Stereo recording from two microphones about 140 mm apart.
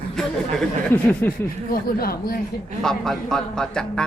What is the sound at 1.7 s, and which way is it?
Speech, 90° left.